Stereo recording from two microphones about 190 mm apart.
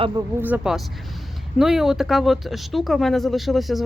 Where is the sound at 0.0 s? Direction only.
25° right (ahead or behind).